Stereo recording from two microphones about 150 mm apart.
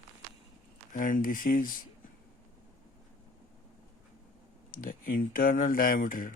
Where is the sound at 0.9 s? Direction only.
65° left (ahead or behind).